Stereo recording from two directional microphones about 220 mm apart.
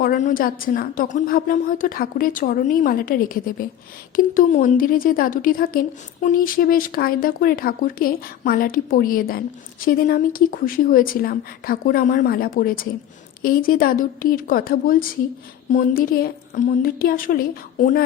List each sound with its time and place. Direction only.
0.0 s a woman's voice: 35° left (ahead or behind)